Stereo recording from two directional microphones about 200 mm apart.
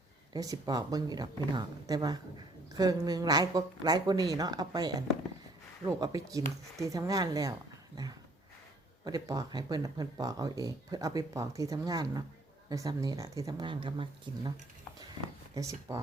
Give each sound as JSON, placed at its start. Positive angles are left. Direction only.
{"t": 0.3, "sound": "speech", "side_deg": -20}
{"t": 9.0, "sound": "speech", "side_deg": -20}
{"t": 15.5, "sound": "speech", "side_deg": -15}